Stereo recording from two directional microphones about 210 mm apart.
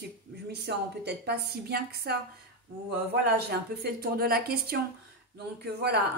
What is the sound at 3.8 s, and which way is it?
Speech, 45° right (ahead or behind).